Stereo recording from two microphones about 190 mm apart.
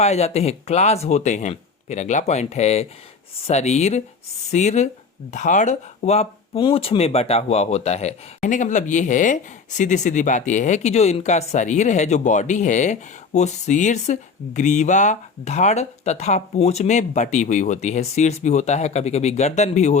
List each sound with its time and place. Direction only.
0.0 s speech: 35° left (ahead or behind)